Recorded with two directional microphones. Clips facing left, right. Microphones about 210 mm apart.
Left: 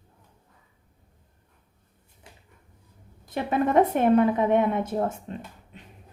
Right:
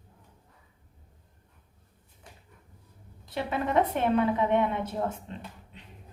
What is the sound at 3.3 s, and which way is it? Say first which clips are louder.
A woman's voice: left 5 dB; 45° left (ahead or behind).